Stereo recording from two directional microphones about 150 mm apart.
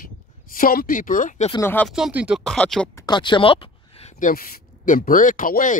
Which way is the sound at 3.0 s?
30° left (ahead or behind).